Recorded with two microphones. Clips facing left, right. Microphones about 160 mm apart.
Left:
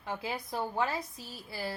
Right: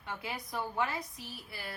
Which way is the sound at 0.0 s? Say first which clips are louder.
Left 4 dB; 30° left (ahead or behind).